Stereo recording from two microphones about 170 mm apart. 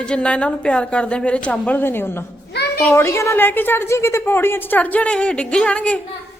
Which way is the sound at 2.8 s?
15° left (ahead or behind).